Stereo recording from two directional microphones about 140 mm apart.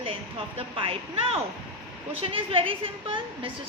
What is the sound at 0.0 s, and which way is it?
A woman's voice, 40° right (ahead or behind).